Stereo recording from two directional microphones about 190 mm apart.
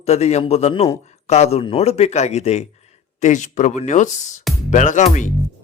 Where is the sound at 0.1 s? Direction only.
35° left (ahead or behind).